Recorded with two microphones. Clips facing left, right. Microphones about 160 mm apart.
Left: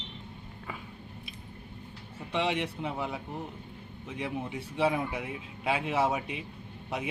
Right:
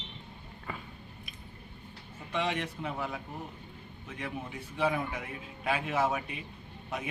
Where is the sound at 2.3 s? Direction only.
20° left (ahead or behind).